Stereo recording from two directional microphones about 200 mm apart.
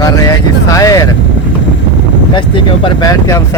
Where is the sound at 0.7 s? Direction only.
15° left (ahead or behind).